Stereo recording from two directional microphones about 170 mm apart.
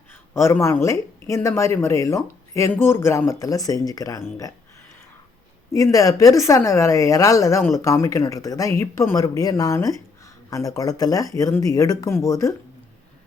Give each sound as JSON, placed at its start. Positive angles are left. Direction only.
{"t": 0.3, "sound": "speech", "side_deg": 15}
{"t": 5.7, "sound": "speech", "side_deg": 20}